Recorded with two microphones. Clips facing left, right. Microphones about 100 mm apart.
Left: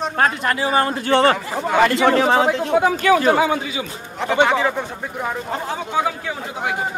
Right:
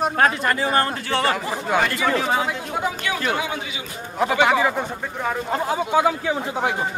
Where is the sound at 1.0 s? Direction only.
55° left (ahead or behind).